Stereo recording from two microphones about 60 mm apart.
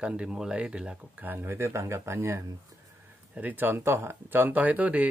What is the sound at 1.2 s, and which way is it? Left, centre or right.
Speech, right.